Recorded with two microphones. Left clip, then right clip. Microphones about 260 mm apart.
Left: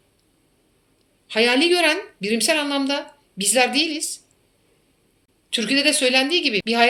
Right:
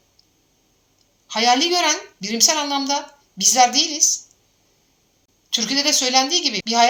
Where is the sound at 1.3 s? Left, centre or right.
Right.